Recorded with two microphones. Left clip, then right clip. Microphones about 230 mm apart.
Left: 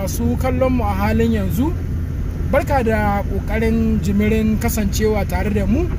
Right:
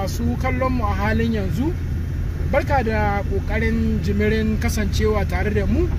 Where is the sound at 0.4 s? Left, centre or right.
Centre.